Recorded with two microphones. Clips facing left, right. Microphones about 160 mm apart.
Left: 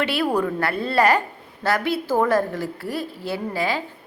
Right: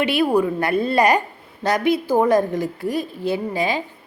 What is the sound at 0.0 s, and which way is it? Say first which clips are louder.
A woman's voice: right 4 dB; 15° right (ahead or behind).